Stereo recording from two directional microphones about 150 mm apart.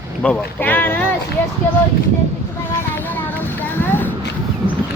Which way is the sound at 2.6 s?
15° left (ahead or behind).